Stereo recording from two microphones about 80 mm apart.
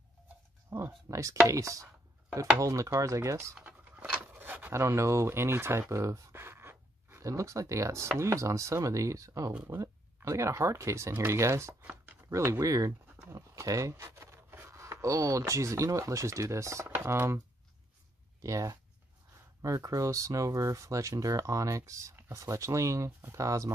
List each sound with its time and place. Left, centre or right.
0.7 s speech: right
3.9 s rub: centre
4.2 s a sound: right
4.7 s speech: right
18.4 s speech: right